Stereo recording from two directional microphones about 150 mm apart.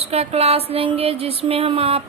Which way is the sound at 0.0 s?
40° right (ahead or behind).